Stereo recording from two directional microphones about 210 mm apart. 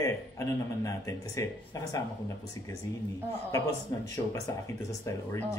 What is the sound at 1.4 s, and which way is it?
Speech, 15° left (ahead or behind).